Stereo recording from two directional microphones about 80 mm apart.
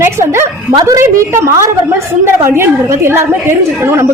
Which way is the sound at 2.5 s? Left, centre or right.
Right.